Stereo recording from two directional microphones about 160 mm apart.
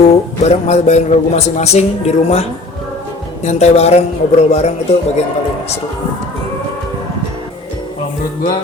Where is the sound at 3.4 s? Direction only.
45° left (ahead or behind).